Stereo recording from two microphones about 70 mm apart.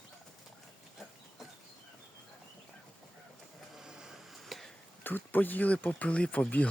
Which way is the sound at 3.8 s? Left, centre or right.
Centre.